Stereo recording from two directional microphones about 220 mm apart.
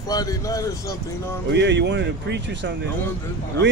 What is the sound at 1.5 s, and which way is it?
Speech, 50° right (ahead or behind).